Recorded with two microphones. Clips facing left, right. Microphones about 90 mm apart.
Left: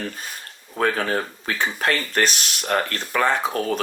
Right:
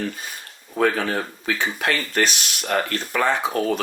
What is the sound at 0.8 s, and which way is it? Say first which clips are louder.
Speech: right 1 dB; 40° left (ahead or behind).